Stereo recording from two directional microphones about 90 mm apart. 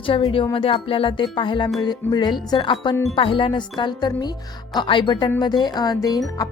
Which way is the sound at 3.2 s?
75° left (ahead or behind).